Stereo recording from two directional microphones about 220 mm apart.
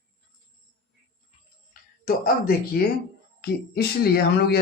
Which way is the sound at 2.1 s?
40° left (ahead or behind).